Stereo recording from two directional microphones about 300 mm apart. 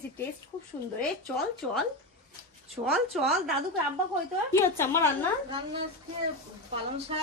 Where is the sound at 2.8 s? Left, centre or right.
Centre.